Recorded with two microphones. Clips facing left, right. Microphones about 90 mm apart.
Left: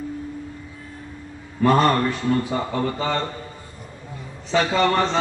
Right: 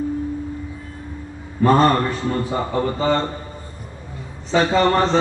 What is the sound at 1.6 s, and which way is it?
Speech, 35° right (ahead or behind).